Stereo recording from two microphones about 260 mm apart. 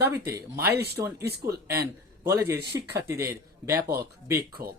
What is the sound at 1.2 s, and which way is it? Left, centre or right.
Speech, right.